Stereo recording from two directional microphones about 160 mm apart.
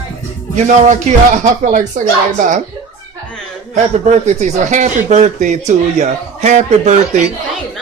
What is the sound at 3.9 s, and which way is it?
Speech, 45° right (ahead or behind).